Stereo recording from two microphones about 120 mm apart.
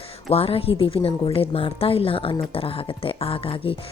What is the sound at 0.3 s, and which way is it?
Speech, 55° left (ahead or behind).